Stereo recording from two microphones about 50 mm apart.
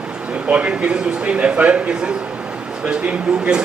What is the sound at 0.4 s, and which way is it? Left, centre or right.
Speech, right.